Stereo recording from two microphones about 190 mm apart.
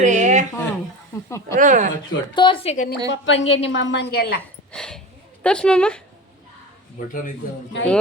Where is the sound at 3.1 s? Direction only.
75° left (ahead or behind); by 4.4 s 55° left (ahead or behind).